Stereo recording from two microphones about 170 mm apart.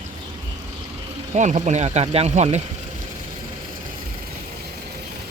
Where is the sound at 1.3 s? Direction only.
45° right (ahead or behind).